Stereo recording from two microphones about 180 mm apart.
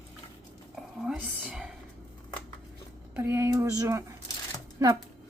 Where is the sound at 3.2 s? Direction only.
15° right (ahead or behind).